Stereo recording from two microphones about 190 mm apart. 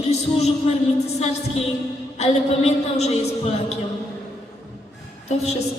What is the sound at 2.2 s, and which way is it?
A woman's voice, 35° left (ahead or behind).